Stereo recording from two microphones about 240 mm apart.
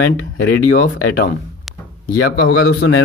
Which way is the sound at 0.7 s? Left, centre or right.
Left.